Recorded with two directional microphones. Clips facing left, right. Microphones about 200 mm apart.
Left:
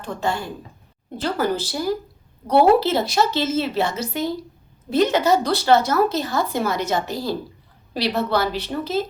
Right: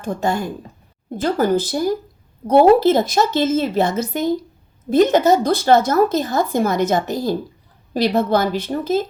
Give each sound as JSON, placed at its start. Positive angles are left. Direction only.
{"t": 0.0, "sound": "a woman's voice", "side_deg": -45}